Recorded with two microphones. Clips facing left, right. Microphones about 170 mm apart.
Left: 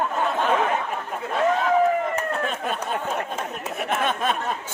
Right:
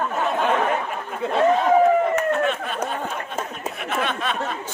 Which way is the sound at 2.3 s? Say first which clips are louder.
Right 5 dB; 40° left (ahead or behind).